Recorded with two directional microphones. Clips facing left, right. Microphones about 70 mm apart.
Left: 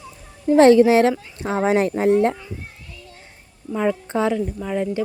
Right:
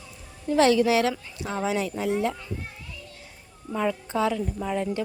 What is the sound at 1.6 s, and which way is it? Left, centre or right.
Speech, left.